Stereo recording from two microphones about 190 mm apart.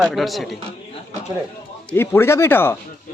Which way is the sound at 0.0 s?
Centre (ahead or behind).